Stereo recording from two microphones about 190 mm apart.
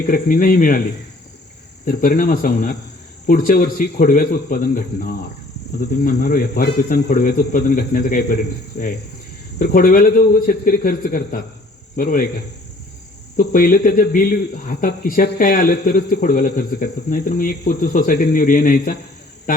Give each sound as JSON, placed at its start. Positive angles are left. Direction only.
{"t": 0.1, "sound": "speech", "side_deg": 45}
{"t": 1.8, "sound": "speech", "side_deg": 45}
{"t": 8.7, "sound": "cricket", "side_deg": 55}
{"t": 9.6, "sound": "speech", "side_deg": 45}
{"t": 13.3, "sound": "speech", "side_deg": 45}